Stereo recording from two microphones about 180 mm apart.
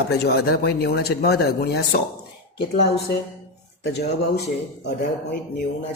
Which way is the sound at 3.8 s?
70° left (ahead or behind).